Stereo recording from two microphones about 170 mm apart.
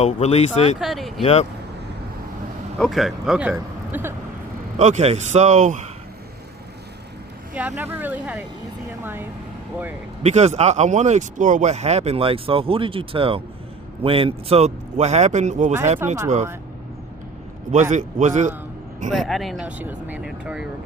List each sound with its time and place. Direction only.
0.0 s speech: 40° left (ahead or behind)
0.8 s speech: centre (ahead or behind)
1.2 s speech: 40° left (ahead or behind)
2.7 s a man's voice: centre (ahead or behind)
4.8 s speech: 40° right (ahead or behind)
7.8 s speech: 10° right (ahead or behind)
10.2 s speech: 40° right (ahead or behind)
16.0 s speech: 15° right (ahead or behind)
17.9 s speech: 45° right (ahead or behind)
19.1 s speech: centre (ahead or behind)